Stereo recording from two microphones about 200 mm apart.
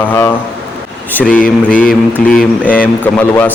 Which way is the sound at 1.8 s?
5° left (ahead or behind).